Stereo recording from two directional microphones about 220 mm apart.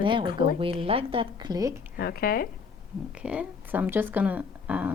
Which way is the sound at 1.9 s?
45° left (ahead or behind).